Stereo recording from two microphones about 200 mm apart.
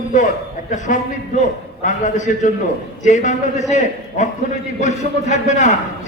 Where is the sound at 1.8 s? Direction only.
40° left (ahead or behind).